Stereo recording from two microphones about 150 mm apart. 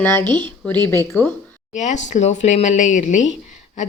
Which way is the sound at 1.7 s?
50° left (ahead or behind).